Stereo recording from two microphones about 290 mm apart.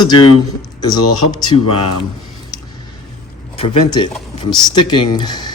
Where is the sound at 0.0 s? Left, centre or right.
Centre.